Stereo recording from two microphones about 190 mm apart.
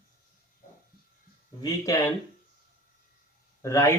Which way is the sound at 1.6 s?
15° left (ahead or behind).